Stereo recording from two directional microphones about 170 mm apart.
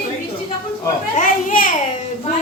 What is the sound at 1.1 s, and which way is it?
Children playing, 50° left (ahead or behind).